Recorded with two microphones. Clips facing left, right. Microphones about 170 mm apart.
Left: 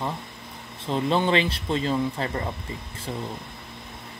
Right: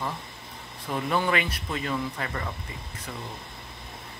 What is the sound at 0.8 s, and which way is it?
Speech, 25° left (ahead or behind).